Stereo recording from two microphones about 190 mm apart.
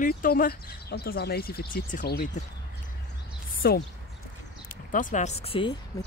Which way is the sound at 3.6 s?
55° left (ahead or behind).